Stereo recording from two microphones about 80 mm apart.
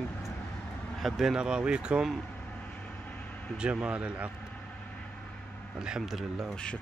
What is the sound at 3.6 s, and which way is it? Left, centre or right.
Speech, centre.